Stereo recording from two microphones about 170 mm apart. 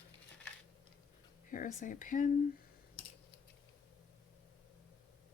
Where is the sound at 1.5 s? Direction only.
50° left (ahead or behind).